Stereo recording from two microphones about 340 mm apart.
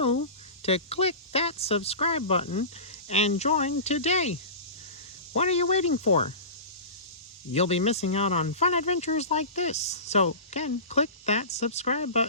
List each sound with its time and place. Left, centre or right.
0.6 s speech: centre
7.5 s speech: centre